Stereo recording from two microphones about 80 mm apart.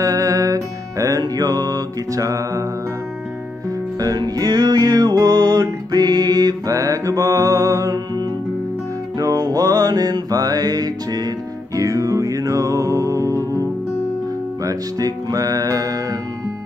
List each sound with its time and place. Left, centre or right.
0.0 s music: right
4.0 s music: right
14.6 s music: right